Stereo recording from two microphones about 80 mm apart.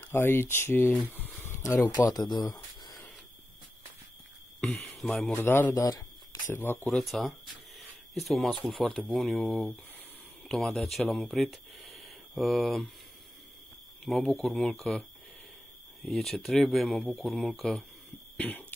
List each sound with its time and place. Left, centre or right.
0.0 s speech: left
1.1 s a sound: left
2.0 s speech: left
4.6 s a sound: centre
5.0 s speech: centre
5.4 s speech: left
5.8 s speech: left
6.5 s speech: left
6.9 s speech: centre
14.0 s speech: centre
16.1 s speech: centre
18.4 s a sound: left